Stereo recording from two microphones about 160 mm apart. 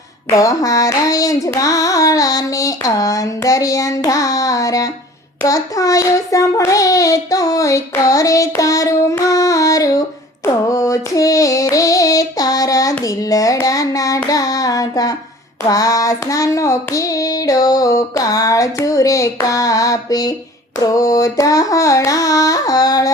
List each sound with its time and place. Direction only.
0.3 s child singing: 20° left (ahead or behind)
10.4 s female singing: 20° left (ahead or behind)
15.7 s child singing: 20° left (ahead or behind)